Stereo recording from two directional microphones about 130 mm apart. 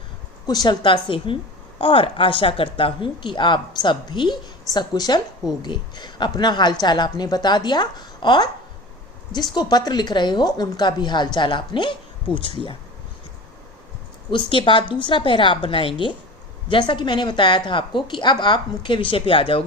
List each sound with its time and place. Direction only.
0.4 s a woman's voice: 30° left (ahead or behind)
14.3 s a woman's voice: 40° left (ahead or behind)